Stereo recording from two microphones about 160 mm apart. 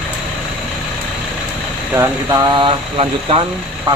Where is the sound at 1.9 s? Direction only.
20° right (ahead or behind).